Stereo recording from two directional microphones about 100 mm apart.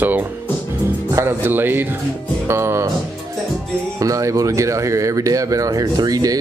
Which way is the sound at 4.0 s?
35° right (ahead or behind).